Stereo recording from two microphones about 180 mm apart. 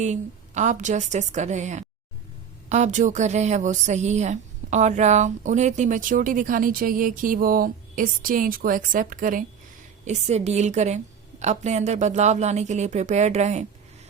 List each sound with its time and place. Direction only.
0.0 s a woman's voice: 40° right (ahead or behind)
10.1 s a woman's voice: 35° right (ahead or behind)